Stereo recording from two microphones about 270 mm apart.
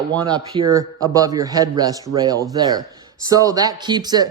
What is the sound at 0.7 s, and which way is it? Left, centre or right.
A man's voice, centre.